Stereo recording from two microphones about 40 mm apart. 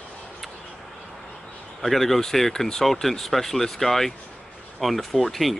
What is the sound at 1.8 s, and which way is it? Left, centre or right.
Speech, centre.